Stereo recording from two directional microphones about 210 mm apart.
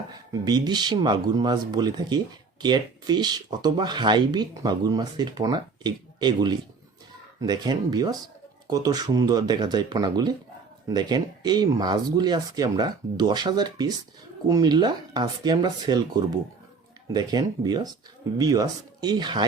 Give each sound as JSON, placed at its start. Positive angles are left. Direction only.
{"t": 0.4, "sound": "speech", "side_deg": -20}